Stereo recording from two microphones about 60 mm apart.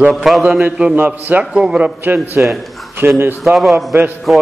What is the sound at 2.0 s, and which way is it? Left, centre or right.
Speech, right.